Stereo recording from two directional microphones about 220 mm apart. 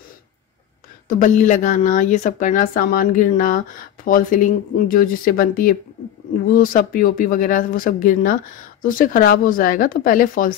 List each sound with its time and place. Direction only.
1.0 s speech: 35° left (ahead or behind)